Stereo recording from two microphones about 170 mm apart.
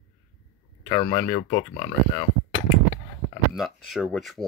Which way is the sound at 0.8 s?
20° left (ahead or behind).